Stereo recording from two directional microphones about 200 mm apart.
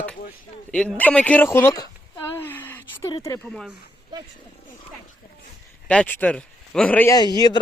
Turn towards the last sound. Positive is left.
turn(degrees=20)  # may be behind; listen again after turning